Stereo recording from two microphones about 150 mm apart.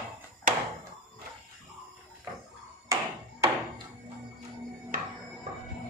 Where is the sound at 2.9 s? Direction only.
20° right (ahead or behind).